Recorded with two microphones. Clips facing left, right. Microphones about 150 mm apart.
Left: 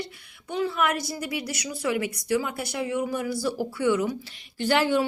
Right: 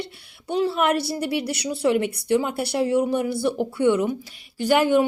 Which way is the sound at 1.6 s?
30° right (ahead or behind).